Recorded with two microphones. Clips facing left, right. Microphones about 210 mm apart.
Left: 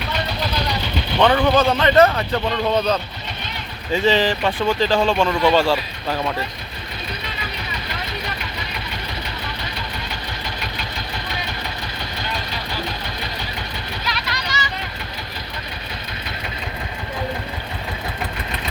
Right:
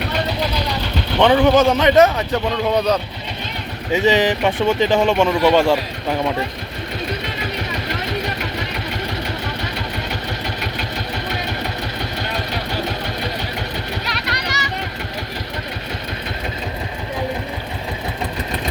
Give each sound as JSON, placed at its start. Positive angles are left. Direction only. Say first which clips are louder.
{"t": 1.2, "sound": "speech", "louder": "right 3 dB", "side_deg": -10}
{"t": 3.9, "sound": "speech", "louder": "right 2 dB", "side_deg": -15}
{"t": 14.4, "sound": "vehicle", "louder": "right 2 dB", "side_deg": -70}